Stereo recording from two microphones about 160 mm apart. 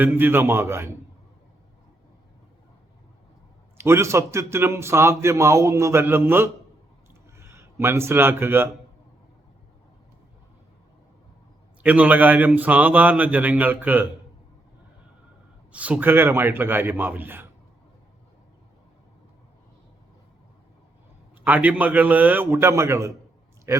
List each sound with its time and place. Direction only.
0.0 s a man's voice: 10° right (ahead or behind)
3.8 s a man's voice: 15° right (ahead or behind)
11.8 s a man's voice: 10° right (ahead or behind)
15.7 s a man's voice: 10° right (ahead or behind)
21.4 s a man's voice: 10° right (ahead or behind)